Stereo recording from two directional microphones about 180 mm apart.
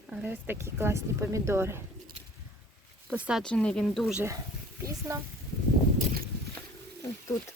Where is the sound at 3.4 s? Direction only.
5° left (ahead or behind).